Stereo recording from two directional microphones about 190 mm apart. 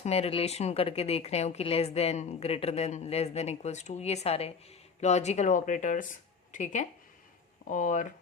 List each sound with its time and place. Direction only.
0.0 s speech: 30° left (ahead or behind)